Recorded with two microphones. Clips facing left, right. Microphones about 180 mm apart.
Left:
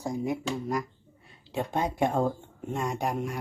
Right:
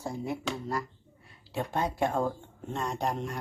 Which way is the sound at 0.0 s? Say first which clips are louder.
Left 4 dB; 15° left (ahead or behind).